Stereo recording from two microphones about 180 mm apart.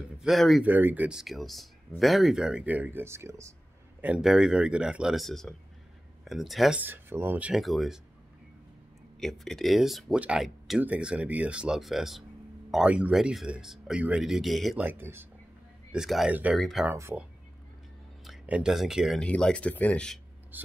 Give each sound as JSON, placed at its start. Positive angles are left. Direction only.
{"t": 0.2, "sound": "speech", "side_deg": 0}
{"t": 4.0, "sound": "speech", "side_deg": -5}
{"t": 9.2, "sound": "speech", "side_deg": 0}
{"t": 16.9, "sound": "speech", "side_deg": -10}
{"t": 20.5, "sound": "speech", "side_deg": -10}